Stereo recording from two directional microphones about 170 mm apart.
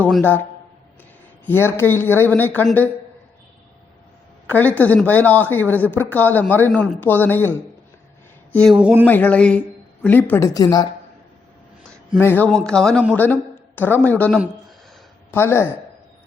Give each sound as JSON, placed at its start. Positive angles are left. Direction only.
{"t": 0.0, "sound": "a man's voice", "side_deg": 10}
{"t": 1.5, "sound": "a man's voice", "side_deg": 15}
{"t": 4.4, "sound": "a man's voice", "side_deg": 10}
{"t": 8.8, "sound": "speech", "side_deg": -5}
{"t": 9.0, "sound": "a man's voice", "side_deg": 10}
{"t": 12.1, "sound": "a man's voice", "side_deg": 10}